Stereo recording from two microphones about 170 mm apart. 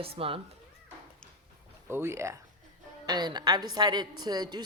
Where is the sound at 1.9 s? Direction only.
15° right (ahead or behind).